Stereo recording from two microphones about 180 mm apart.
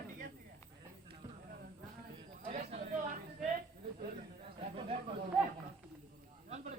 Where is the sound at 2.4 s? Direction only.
50° right (ahead or behind).